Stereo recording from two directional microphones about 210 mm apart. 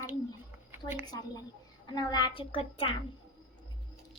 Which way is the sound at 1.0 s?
20° left (ahead or behind).